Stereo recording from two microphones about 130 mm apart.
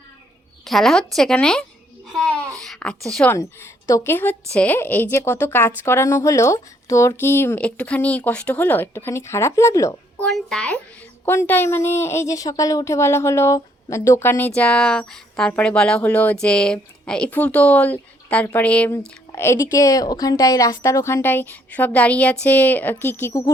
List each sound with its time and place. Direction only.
0.6 s a woman's voice: centre (ahead or behind)
3.2 s speech: 20° left (ahead or behind)
10.2 s a woman's voice: 5° left (ahead or behind)
19.4 s speech: 20° left (ahead or behind)